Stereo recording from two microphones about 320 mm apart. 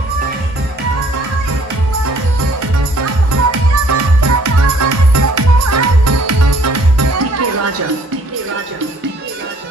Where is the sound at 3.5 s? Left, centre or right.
Right.